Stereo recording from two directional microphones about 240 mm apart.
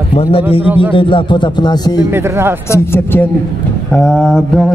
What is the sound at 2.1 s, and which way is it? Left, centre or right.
Speech, centre.